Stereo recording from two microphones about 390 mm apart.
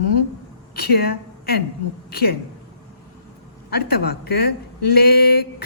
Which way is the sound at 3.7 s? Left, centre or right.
Left.